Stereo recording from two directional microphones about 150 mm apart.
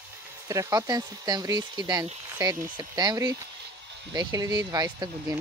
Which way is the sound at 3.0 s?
25° right (ahead or behind).